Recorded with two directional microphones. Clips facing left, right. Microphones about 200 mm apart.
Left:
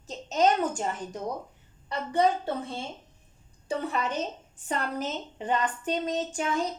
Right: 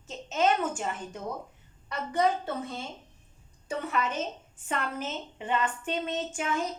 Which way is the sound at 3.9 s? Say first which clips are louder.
Left 1 dB; 35° left (ahead or behind).